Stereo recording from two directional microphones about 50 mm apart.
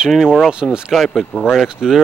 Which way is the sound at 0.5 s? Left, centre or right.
Centre.